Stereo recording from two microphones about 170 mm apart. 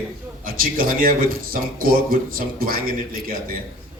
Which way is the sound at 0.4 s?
55° right (ahead or behind).